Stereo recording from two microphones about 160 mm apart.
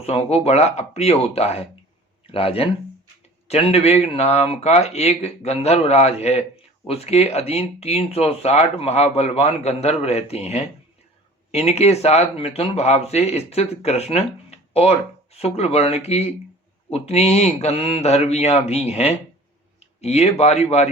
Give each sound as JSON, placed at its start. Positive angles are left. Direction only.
{"t": 0.0, "sound": "a man's voice", "side_deg": 40}